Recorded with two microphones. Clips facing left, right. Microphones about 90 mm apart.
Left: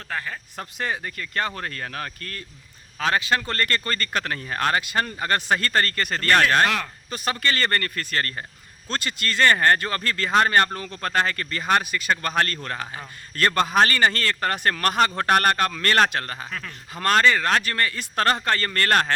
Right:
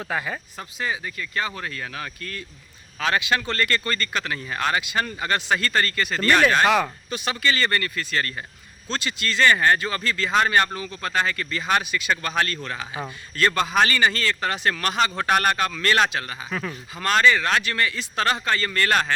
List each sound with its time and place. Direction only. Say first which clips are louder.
0.1 s speech: right 2 dB; 15° right (ahead or behind)
0.8 s speech: even; 50° left (ahead or behind)
16.5 s speech: right 5 dB; 10° right (ahead or behind)
17.0 s speech: even; 45° left (ahead or behind)